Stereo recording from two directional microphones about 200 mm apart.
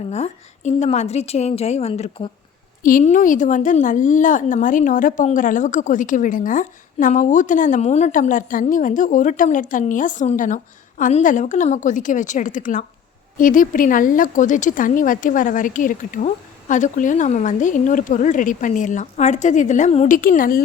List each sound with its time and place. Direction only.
0.1 s speech: 35° left (ahead or behind)
2.8 s speech: 40° left (ahead or behind)